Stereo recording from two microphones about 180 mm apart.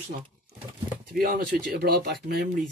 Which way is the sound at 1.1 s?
55° right (ahead or behind).